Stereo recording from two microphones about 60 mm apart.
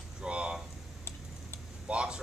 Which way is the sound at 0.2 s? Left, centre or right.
Centre.